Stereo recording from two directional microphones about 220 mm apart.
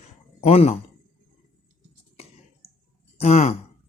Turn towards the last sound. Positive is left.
turn(degrees=30)  # may be behind; listen again after turning